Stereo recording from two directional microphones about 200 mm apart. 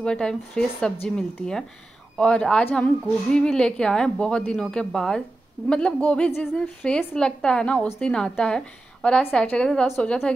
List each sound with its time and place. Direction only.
0.0 s a woman's voice: 5° left (ahead or behind)